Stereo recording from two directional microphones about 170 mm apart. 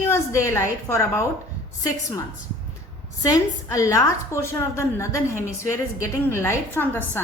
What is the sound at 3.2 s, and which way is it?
A woman's voice, 20° left (ahead or behind).